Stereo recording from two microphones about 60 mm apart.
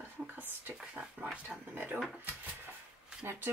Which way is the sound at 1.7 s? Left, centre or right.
Right.